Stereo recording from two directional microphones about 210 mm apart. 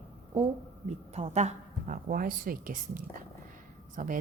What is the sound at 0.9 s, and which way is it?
A woman's voice, 30° right (ahead or behind).